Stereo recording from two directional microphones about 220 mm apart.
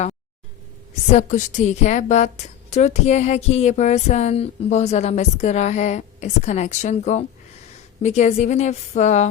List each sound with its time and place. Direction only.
1.1 s a woman's voice: 35° left (ahead or behind)